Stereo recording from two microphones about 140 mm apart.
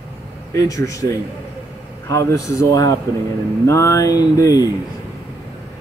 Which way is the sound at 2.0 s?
25° left (ahead or behind).